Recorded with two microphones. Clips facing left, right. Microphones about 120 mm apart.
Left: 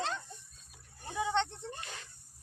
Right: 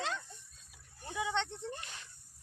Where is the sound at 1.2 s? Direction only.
35° left (ahead or behind).